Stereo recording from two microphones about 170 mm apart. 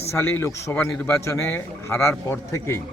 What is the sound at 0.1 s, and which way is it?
A man's voice, 15° left (ahead or behind).